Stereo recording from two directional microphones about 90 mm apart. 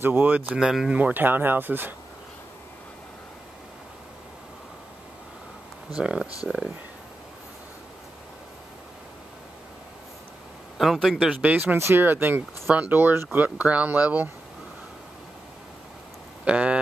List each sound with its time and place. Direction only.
0.0 s speech: 25° right (ahead or behind)
0.6 s speech: 5° right (ahead or behind)
0.9 s speech: 20° right (ahead or behind)
5.9 s speech: 10° right (ahead or behind)
10.8 s a man's voice: centre (ahead or behind)
11.4 s speech: 20° right (ahead or behind)
16.4 s speech: 15° right (ahead or behind)